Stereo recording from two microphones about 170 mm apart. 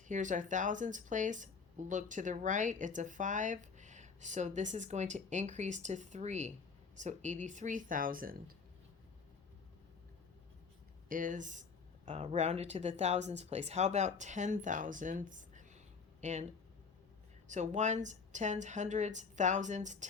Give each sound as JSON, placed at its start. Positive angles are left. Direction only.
{"t": 0.1, "sound": "speech", "side_deg": -50}
{"t": 11.1, "sound": "speech", "side_deg": -50}
{"t": 17.5, "sound": "speech", "side_deg": -45}